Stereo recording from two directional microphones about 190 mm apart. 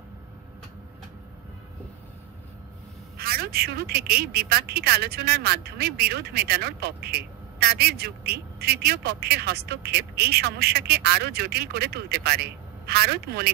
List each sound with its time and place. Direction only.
3.2 s a woman's voice: 55° right (ahead or behind)